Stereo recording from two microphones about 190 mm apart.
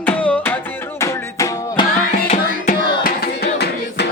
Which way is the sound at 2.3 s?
45° left (ahead or behind).